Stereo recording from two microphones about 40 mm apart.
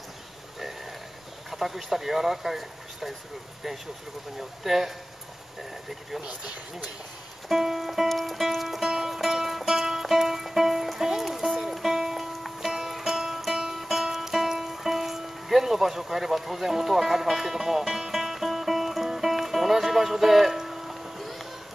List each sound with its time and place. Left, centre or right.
1.5 s speech: centre
4.4 s music: centre
5.6 s speech: centre
6.2 s speech: right
7.4 s music: centre